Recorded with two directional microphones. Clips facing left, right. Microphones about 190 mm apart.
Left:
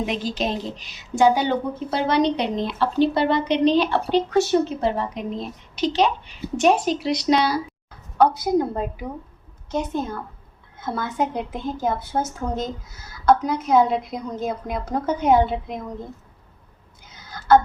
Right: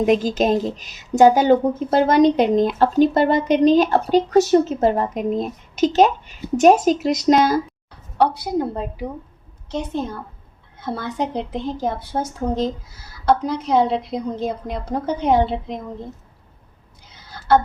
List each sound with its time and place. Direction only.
0.0 s a woman's voice: 45° right (ahead or behind)
7.9 s a woman's voice: 30° right (ahead or behind)
10.8 s a woman's voice: 30° right (ahead or behind)
17.2 s a sound: 30° right (ahead or behind)